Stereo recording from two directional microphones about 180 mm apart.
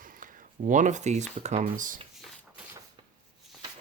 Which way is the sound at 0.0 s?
50° right (ahead or behind).